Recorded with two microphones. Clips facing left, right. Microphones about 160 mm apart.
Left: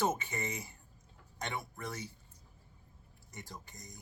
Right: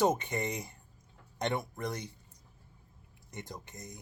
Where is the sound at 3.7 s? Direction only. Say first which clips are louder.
Right 6 dB; centre (ahead or behind).